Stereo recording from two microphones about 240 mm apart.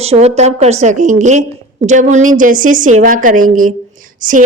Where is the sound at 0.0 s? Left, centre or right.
Right.